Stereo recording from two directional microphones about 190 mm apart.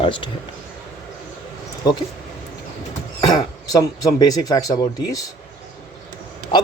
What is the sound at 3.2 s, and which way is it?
Speech, 20° left (ahead or behind).